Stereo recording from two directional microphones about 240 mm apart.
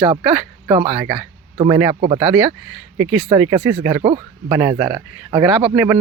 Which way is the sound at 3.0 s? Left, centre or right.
Centre.